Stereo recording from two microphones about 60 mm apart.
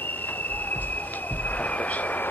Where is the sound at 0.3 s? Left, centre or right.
Left.